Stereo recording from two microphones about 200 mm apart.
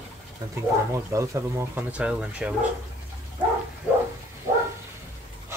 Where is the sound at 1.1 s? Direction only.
15° right (ahead or behind).